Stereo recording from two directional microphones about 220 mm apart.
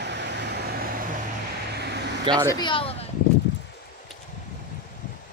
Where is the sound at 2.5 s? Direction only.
20° left (ahead or behind).